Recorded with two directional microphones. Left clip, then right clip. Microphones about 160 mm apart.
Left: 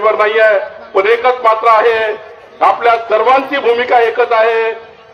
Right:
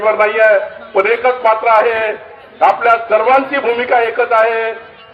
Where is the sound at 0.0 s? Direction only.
45° left (ahead or behind).